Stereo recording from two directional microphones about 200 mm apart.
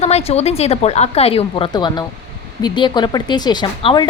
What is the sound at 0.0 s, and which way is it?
A woman's voice, 30° left (ahead or behind).